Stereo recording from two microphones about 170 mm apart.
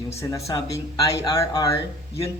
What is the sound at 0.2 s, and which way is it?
Speech, 20° left (ahead or behind).